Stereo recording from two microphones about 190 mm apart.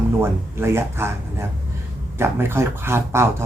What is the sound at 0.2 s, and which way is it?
Speech, 15° right (ahead or behind).